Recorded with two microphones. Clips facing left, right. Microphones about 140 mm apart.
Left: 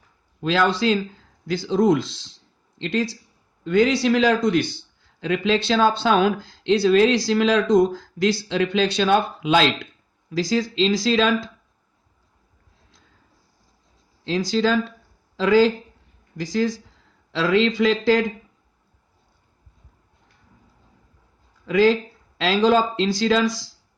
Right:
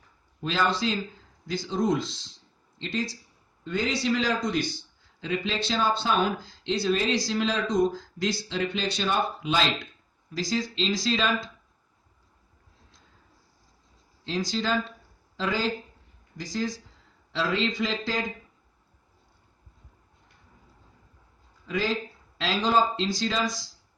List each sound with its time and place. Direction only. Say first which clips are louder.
0.4 s speech: left 7 dB; 90° left; by 3.2 s 70° left (ahead or behind)
3.6 s speech: left 10 dB; 85° left; by 4.8 s 65° left (ahead or behind)
5.2 s speech: left 8 dB; 80° left
14.5 s speech: left 9 dB; 90° left
16.4 s speech: left 8 dB; 70° left (ahead or behind)
17.3 s speech: left 8 dB; 85° left
21.7 s speech: left 11 dB; 90° left